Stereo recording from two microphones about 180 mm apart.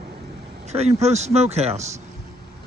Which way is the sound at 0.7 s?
35° right (ahead or behind).